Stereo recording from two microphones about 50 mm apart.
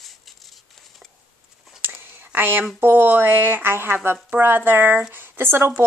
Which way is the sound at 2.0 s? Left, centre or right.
Right.